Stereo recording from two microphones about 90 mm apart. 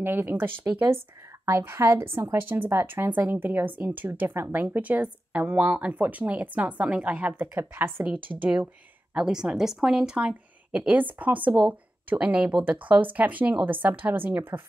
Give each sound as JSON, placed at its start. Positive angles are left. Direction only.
{"t": 0.0, "sound": "a woman's voice", "side_deg": -25}
{"t": 9.1, "sound": "a woman's voice", "side_deg": -5}